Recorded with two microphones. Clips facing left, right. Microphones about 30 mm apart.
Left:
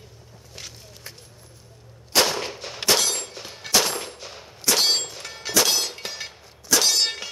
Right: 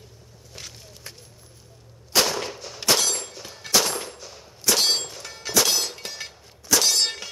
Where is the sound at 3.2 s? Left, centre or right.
Centre.